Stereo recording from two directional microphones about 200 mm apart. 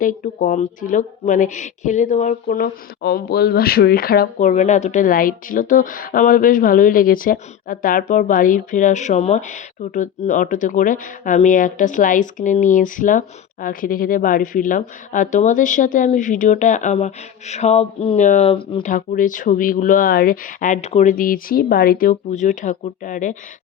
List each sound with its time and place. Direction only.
0.0 s speech: 40° left (ahead or behind); by 18.9 s 25° left (ahead or behind)
18.9 s speech: 40° left (ahead or behind)